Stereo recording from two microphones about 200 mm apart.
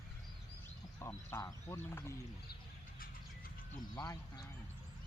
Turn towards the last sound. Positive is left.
turn(degrees=20)  # may be behind; listen again after turning